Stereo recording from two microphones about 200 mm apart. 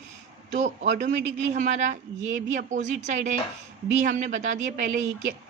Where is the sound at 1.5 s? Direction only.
40° right (ahead or behind).